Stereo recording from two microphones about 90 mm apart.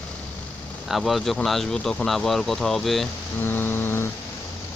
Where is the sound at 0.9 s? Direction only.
Centre (ahead or behind).